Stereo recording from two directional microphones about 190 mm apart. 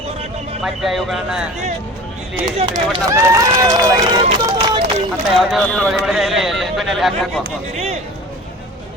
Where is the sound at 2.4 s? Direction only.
20° right (ahead or behind).